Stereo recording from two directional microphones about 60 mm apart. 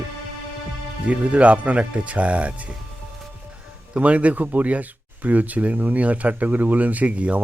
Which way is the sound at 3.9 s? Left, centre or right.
Right.